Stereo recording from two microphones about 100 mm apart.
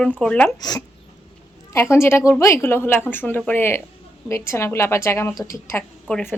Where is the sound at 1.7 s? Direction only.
25° left (ahead or behind).